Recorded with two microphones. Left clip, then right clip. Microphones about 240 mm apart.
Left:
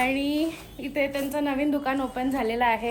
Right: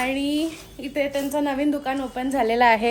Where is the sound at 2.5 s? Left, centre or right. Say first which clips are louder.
Right 7 dB; right.